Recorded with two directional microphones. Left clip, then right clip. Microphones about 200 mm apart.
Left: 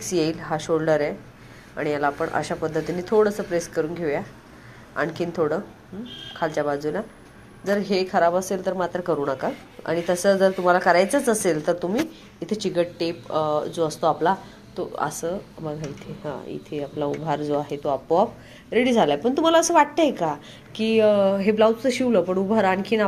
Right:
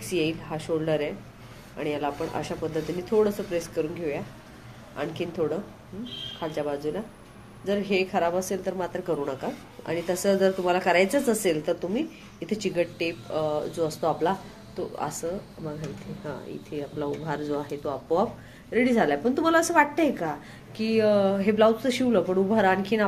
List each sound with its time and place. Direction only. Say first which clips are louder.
0.1 s a woman's voice: left 4 dB; 20° left (ahead or behind)
13.3 s a woman's voice: left 6 dB; 20° left (ahead or behind)